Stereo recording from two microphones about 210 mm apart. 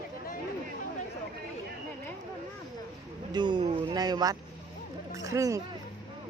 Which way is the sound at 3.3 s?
20° right (ahead or behind).